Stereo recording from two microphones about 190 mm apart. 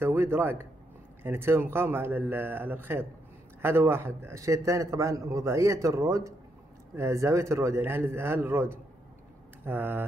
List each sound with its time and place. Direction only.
0.0 s a man's voice: 10° right (ahead or behind)